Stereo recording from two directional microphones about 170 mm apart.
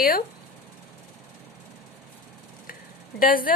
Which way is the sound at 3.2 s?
55° left (ahead or behind).